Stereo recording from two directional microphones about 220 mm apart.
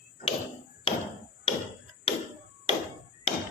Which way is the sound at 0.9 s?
25° left (ahead or behind).